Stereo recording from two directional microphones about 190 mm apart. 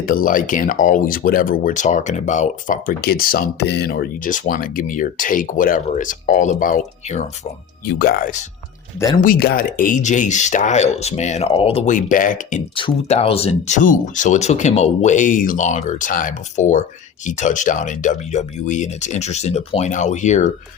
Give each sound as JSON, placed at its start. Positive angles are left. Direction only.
{"t": 0.0, "sound": "speech", "side_deg": 50}
{"t": 7.9, "sound": "speech", "side_deg": 50}
{"t": 9.0, "sound": "speech", "side_deg": 20}
{"t": 9.2, "sound": "speech", "side_deg": 50}
{"t": 12.7, "sound": "speech", "side_deg": 30}